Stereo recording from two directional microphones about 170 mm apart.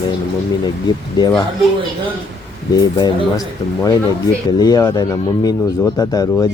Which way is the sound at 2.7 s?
25° left (ahead or behind).